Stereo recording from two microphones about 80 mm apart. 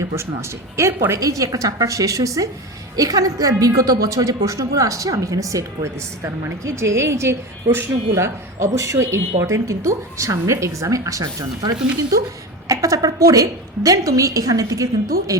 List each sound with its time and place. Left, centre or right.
0.8 s a woman's voice: right
1.2 s a woman's voice: right